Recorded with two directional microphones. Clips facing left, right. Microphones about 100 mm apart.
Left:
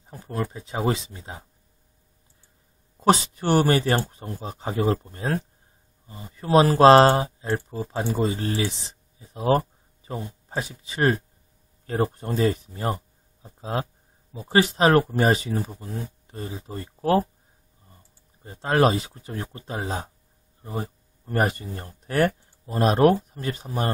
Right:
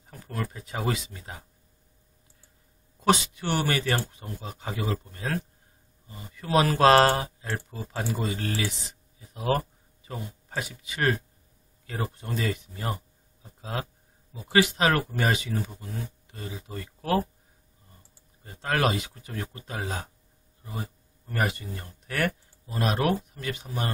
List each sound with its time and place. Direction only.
0.0 s speech: 30° left (ahead or behind)
3.0 s speech: 35° left (ahead or behind)
11.8 s speech: 40° left (ahead or behind)
18.4 s speech: 25° left (ahead or behind)